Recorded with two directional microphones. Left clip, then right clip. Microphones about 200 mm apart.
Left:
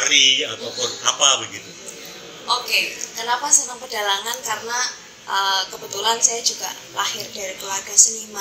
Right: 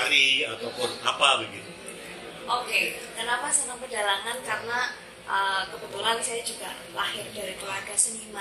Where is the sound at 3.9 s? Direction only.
30° left (ahead or behind).